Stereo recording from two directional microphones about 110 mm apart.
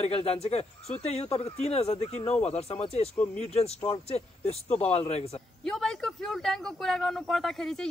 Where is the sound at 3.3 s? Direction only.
70° left (ahead or behind).